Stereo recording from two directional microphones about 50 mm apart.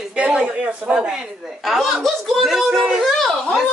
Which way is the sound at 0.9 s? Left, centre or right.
Centre.